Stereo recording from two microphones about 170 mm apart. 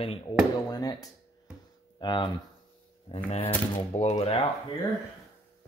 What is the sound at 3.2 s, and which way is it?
Speech, 35° left (ahead or behind).